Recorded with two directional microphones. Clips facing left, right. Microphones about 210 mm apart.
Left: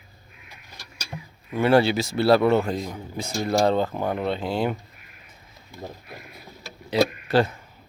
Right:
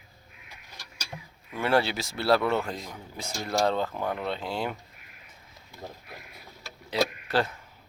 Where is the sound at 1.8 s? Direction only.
Centre (ahead or behind).